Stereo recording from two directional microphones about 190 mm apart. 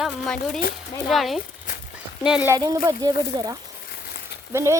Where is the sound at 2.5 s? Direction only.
20° right (ahead or behind).